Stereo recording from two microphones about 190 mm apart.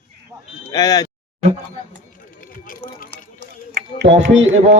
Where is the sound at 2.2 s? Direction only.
45° left (ahead or behind).